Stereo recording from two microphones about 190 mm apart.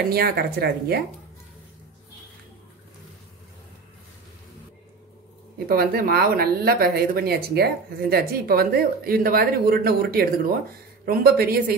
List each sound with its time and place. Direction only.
0.1 s a woman's voice: 55° right (ahead or behind)
5.7 s a woman's voice: 50° right (ahead or behind)